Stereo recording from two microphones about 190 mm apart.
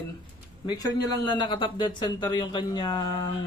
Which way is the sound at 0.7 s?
20° left (ahead or behind).